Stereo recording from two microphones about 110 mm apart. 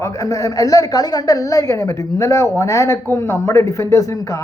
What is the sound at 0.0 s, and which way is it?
A woman's voice, 30° left (ahead or behind).